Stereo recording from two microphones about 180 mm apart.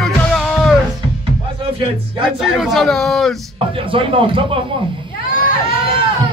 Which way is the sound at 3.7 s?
30° right (ahead or behind).